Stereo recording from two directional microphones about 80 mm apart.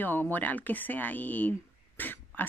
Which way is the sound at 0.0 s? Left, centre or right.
Left.